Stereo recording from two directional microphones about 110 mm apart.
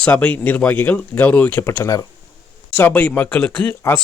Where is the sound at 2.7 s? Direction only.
15° left (ahead or behind).